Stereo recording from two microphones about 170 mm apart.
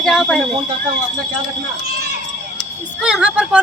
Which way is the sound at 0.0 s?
Centre (ahead or behind).